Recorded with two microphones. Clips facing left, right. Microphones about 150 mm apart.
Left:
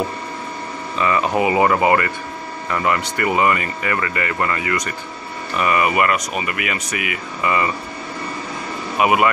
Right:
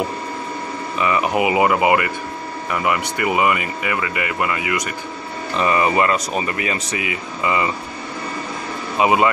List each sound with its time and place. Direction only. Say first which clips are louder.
0.9 s speech: even; 15° right (ahead or behind)
5.6 s speech: right 1 dB; 25° right (ahead or behind)
8.9 s speech: even; 25° right (ahead or behind)